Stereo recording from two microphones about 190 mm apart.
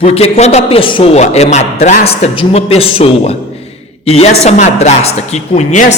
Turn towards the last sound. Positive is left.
turn(degrees=40)  # may be behind; listen again after turning